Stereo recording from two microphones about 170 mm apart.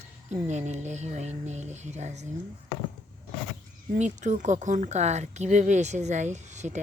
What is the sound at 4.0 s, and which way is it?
A woman's voice, 45° right (ahead or behind).